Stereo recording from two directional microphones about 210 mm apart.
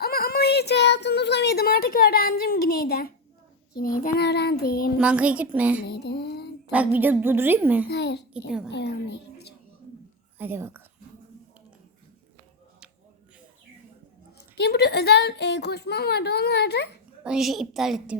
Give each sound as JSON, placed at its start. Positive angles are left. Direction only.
{"t": 0.0, "sound": "a sound", "side_deg": 45}
{"t": 3.8, "sound": "speech", "side_deg": 45}
{"t": 4.9, "sound": "a woman's voice", "side_deg": -5}
{"t": 5.9, "sound": "mantra", "side_deg": 50}
{"t": 6.7, "sound": "a woman's voice", "side_deg": -10}
{"t": 7.9, "sound": "speech", "side_deg": 55}
{"t": 8.3, "sound": "a child's voice", "side_deg": -5}
{"t": 8.7, "sound": "a woman's voice", "side_deg": 55}
{"t": 10.3, "sound": "speech", "side_deg": -10}
{"t": 14.3, "sound": "speech", "side_deg": 50}
{"t": 17.2, "sound": "a woman's voice", "side_deg": 0}